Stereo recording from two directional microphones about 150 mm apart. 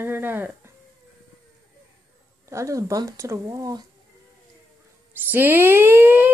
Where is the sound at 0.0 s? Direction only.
15° right (ahead or behind).